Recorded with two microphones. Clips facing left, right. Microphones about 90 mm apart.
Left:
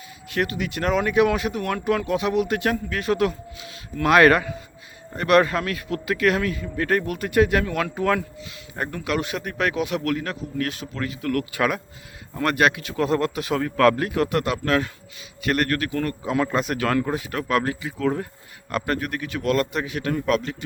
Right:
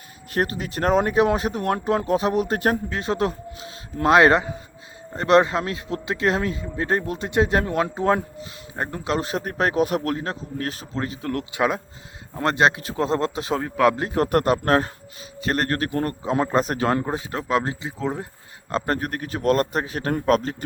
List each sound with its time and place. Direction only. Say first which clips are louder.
0.3 s a man's voice: right 1 dB; 35° right (ahead or behind)
2.9 s a man's voice: left 1 dB; 30° right (ahead or behind)
14.1 s a man's voice: right 3 dB; 40° right (ahead or behind); by 18.3 s 20° right (ahead or behind)
18.7 s a man's voice: right 1 dB; 35° right (ahead or behind)